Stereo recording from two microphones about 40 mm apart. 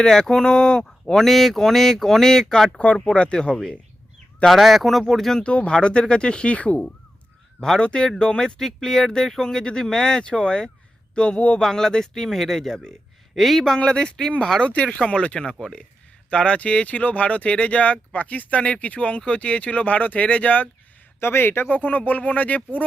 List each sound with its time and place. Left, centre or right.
0.0 s speech: centre
2.7 s speech: left
3.5 s speech: centre
4.4 s speech: centre
5.4 s speech: left
8.0 s speech: centre; by 11.6 s left
11.6 s speech: centre
13.7 s speech: left
21.2 s speech: left
21.7 s speech: left